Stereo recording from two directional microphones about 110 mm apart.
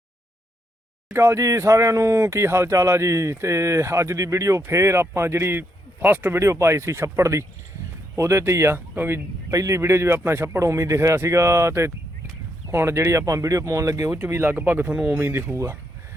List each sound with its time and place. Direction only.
1.1 s speech: 25° right (ahead or behind)